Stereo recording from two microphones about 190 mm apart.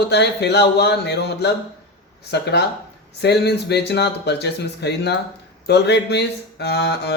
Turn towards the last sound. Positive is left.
turn(degrees=60)  # may be behind; listen again after turning